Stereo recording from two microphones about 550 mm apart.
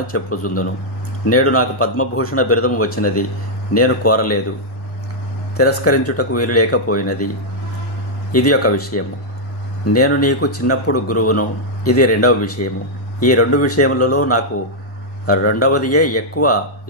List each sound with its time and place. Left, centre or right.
0.0 s speech: left
5.6 s speech: left
8.3 s speech: left